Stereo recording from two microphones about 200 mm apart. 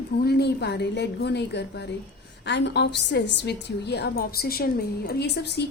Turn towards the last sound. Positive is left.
turn(degrees=55)  # may be behind; listen again after turning